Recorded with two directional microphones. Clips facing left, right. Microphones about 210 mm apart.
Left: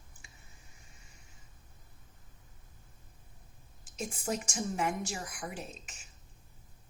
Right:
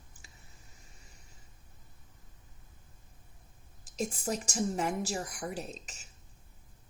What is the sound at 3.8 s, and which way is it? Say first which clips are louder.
A woman's voice: right 3 dB; 35° right (ahead or behind).